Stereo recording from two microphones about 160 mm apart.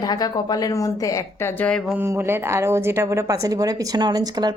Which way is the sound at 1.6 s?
5° left (ahead or behind).